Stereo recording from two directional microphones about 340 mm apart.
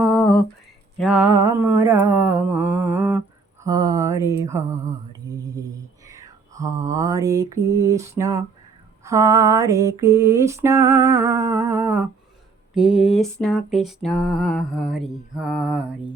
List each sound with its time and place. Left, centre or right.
0.0 s a sound: centre
0.9 s mantra: centre
9.0 s female singing: centre
12.7 s mantra: centre